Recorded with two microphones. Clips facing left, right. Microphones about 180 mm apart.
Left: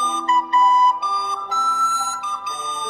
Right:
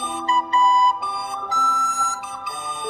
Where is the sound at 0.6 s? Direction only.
35° right (ahead or behind).